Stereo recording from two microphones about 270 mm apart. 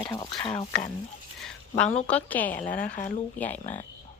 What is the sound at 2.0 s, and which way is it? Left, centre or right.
Speech, centre.